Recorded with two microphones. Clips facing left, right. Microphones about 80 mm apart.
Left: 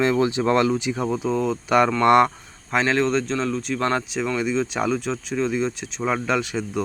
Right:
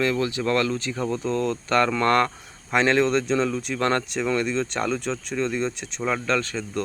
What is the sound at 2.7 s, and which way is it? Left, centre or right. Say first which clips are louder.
Speech: right 1 dB; centre.